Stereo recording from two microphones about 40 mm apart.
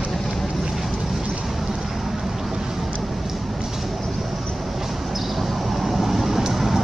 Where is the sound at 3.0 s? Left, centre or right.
Centre.